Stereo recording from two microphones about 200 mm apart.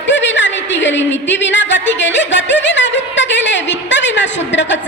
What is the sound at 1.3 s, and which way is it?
A woman's voice, 65° left (ahead or behind).